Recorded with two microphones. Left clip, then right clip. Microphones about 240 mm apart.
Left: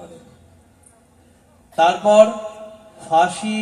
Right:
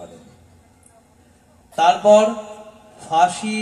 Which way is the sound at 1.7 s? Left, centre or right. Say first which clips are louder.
Even; right.